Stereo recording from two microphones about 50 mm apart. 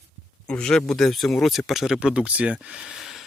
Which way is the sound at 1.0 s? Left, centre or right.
Centre.